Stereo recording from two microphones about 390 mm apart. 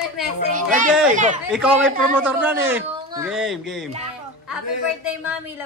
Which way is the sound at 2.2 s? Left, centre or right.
Centre.